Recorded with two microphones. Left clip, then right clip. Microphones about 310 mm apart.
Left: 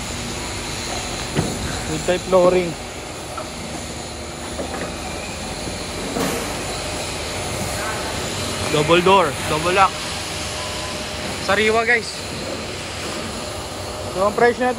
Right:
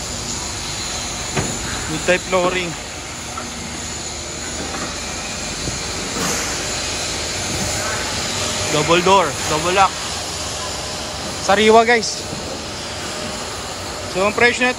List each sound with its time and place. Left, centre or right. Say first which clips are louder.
2.0 s speech: left 2 dB; centre
8.7 s speech: even; centre
11.4 s speech: right 5 dB; centre
14.2 s speech: right 1 dB; centre